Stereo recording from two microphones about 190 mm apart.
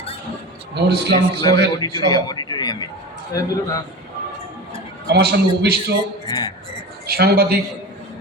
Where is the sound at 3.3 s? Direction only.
20° left (ahead or behind).